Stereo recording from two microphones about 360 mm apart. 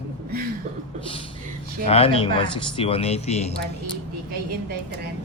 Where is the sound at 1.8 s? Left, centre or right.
Centre.